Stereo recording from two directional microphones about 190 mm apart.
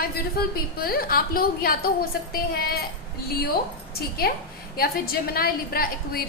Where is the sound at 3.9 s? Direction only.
55° left (ahead or behind).